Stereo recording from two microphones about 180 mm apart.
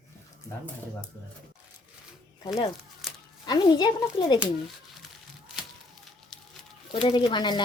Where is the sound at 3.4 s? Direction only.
25° left (ahead or behind).